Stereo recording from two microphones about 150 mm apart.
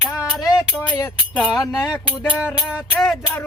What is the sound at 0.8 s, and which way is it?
Music, 15° left (ahead or behind).